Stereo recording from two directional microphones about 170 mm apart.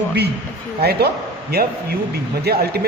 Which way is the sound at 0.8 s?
70° right (ahead or behind).